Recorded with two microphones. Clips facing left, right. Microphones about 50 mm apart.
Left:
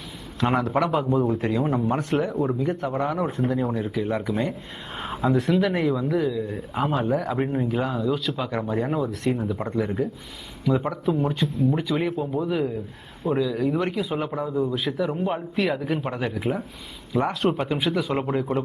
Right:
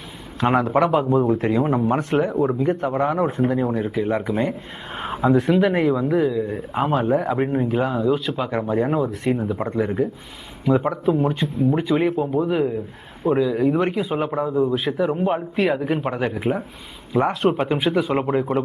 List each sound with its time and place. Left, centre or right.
0.5 s speech: centre
2.0 s speech: centre
6.3 s speech: centre
6.6 s speech: centre
7.0 s speech: centre
10.7 s speech: centre
11.0 s speech: centre
14.5 s speech: centre
14.9 s speech: centre